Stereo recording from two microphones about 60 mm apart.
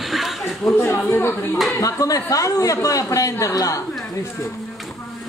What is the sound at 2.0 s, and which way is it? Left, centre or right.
A man's voice, left.